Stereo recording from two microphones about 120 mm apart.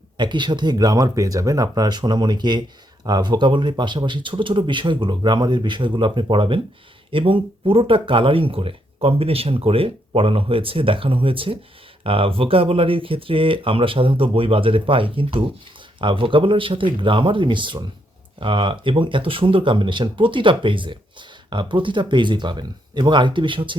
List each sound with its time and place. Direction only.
0.2 s speech: 40° right (ahead or behind)